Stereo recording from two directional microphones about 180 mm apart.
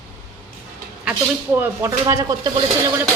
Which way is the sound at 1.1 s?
10° right (ahead or behind).